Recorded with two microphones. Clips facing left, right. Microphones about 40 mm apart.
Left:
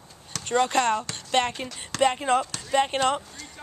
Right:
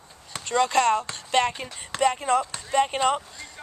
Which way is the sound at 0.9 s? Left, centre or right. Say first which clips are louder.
Right 2 dB; right.